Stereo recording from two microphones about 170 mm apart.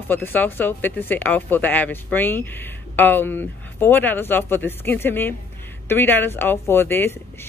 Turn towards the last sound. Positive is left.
turn(degrees=15)  # may be behind; listen again after turning